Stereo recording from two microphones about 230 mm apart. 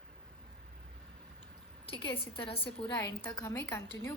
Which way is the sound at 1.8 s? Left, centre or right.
Left.